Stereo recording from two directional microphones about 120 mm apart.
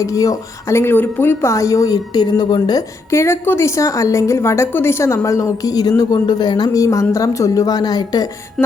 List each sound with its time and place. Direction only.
0.0 s a woman's voice: 30° left (ahead or behind)
3.1 s a woman's voice: 20° left (ahead or behind)
8.6 s a sound: 5° left (ahead or behind)